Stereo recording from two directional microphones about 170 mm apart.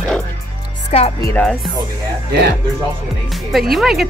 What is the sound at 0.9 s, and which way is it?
Speech, 40° left (ahead or behind).